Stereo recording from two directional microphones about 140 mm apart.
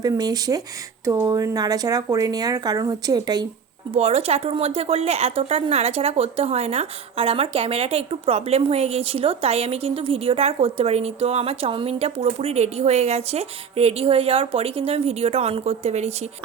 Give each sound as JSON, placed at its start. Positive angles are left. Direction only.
{"t": 0.0, "sound": "speech", "side_deg": -25}
{"t": 3.9, "sound": "speech", "side_deg": -45}